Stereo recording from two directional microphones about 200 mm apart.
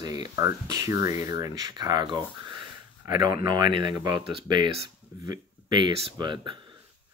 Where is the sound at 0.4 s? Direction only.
15° right (ahead or behind).